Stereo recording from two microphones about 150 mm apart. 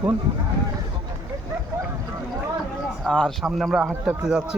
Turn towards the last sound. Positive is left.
turn(degrees=-5)  # may be behind; listen again after turning